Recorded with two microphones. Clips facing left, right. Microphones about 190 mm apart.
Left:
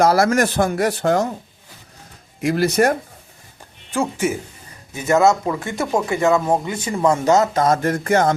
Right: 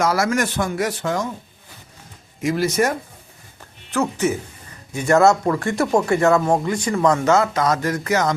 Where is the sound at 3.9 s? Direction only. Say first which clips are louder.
Even; 10° left (ahead or behind).